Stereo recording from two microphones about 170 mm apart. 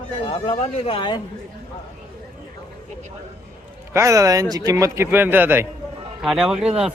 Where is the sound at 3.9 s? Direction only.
15° right (ahead or behind).